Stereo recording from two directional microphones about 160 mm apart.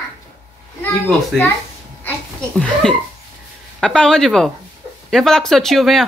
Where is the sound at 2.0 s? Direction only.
5° left (ahead or behind).